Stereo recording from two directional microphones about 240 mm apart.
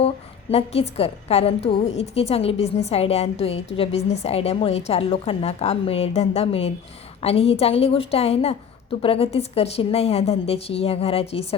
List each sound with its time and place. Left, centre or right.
0.5 s a woman's voice: left